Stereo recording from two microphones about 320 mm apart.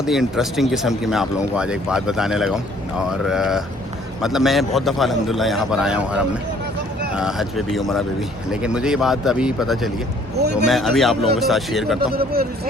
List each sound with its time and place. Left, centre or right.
0.0 s speech: centre
11.9 s speech: right